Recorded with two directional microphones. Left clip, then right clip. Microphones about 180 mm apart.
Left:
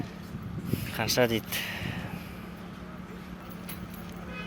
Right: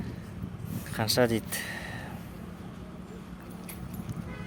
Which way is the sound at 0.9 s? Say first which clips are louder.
Even; 20° right (ahead or behind).